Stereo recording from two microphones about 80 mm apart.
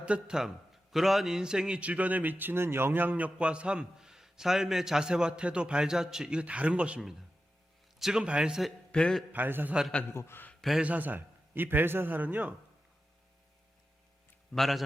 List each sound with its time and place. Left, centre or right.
0.0 s a man's voice: centre
8.9 s a man's voice: centre
9.3 s a man's voice: right
10.1 s a man's voice: left
10.8 s a man's voice: centre
14.5 s speech: centre